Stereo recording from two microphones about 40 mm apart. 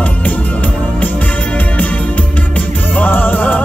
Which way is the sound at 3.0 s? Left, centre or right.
Left.